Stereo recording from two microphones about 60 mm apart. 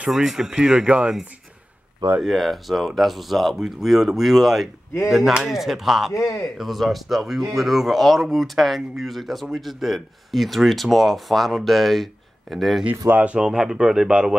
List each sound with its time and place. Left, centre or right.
0.1 s speech: centre
0.8 s speech: centre
2.2 s speech: centre
13.1 s speech: right
13.5 s speech: centre